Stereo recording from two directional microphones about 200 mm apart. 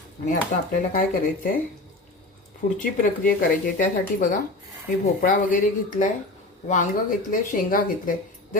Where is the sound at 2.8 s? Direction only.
45° left (ahead or behind).